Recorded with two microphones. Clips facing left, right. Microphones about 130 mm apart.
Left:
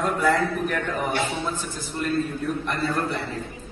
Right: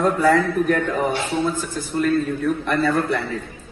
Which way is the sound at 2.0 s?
60° right (ahead or behind).